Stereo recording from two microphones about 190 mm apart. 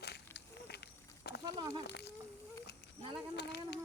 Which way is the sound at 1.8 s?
60° left (ahead or behind).